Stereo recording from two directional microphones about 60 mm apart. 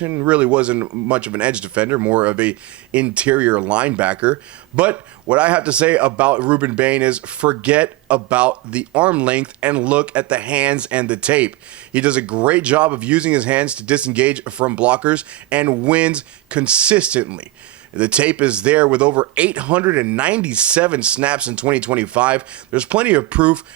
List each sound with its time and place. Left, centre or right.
0.3 s speech: right
1.9 s speech: right
2.1 s speech: right